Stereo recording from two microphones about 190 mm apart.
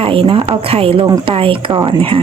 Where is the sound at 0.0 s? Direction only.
30° right (ahead or behind).